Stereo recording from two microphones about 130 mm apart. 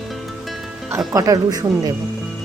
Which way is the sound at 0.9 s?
25° right (ahead or behind).